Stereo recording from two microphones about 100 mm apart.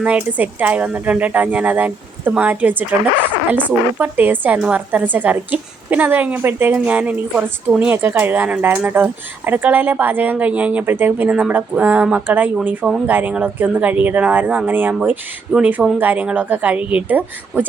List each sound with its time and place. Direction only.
0.2 s a woman's voice: 15° right (ahead or behind)